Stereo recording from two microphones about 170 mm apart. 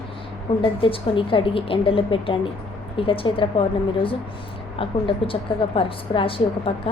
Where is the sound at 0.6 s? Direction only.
30° left (ahead or behind).